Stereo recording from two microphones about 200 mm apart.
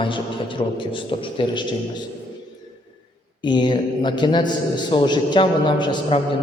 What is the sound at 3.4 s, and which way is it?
A man's voice, 25° left (ahead or behind).